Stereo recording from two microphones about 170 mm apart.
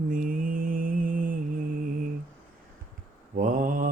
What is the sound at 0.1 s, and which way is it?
Mantra, 55° right (ahead or behind).